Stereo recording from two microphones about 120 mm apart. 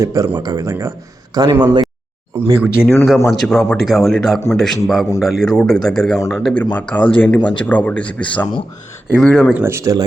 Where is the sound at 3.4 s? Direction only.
Centre (ahead or behind).